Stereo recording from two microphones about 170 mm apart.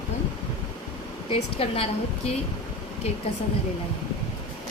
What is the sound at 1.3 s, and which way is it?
Speech, 35° left (ahead or behind).